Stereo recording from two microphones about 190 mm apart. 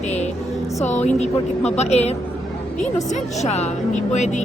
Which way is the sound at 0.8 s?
40° left (ahead or behind).